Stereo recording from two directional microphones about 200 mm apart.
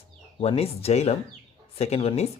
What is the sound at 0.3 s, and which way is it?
Speech, 30° left (ahead or behind).